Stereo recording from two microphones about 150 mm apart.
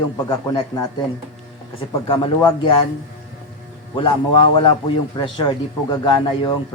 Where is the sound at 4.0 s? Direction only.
35° left (ahead or behind).